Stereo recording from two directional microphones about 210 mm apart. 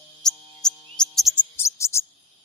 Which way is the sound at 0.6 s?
Centre (ahead or behind).